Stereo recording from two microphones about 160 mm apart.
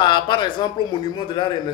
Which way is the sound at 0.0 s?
30° left (ahead or behind).